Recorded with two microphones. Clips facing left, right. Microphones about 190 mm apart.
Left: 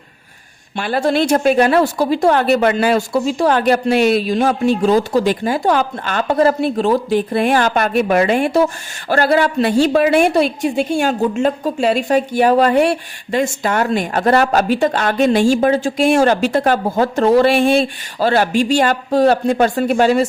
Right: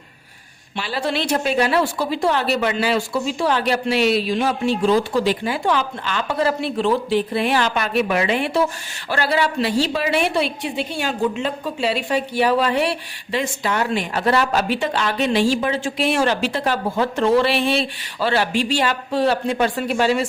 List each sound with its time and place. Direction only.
0.8 s a woman's voice: 50° left (ahead or behind)